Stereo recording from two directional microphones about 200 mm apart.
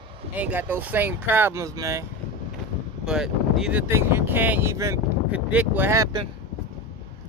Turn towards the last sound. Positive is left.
turn(degrees=-20)  # may be behind; listen again after turning